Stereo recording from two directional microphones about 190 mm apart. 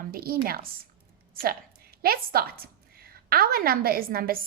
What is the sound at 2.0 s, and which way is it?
A woman's voice, 50° right (ahead or behind).